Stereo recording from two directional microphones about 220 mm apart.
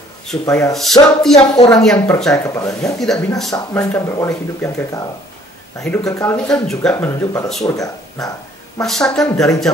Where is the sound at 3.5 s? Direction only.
10° left (ahead or behind).